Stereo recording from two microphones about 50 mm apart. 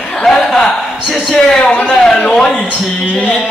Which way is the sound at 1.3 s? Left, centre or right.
Centre.